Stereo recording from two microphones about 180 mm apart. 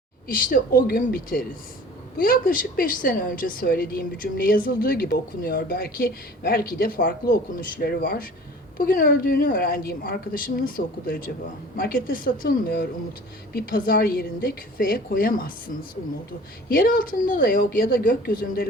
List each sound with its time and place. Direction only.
0.3 s a woman's voice: 50° left (ahead or behind)